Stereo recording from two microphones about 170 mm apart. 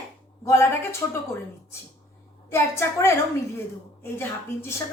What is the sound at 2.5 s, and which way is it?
A woman's voice, 15° left (ahead or behind).